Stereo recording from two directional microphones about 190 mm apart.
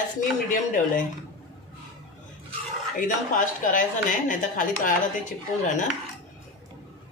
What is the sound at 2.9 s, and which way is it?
A woman's voice, 45° left (ahead or behind).